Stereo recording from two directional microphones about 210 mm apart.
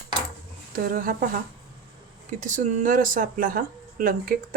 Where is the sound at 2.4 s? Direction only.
35° right (ahead or behind).